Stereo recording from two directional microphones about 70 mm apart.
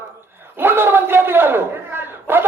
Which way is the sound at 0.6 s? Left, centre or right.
Right.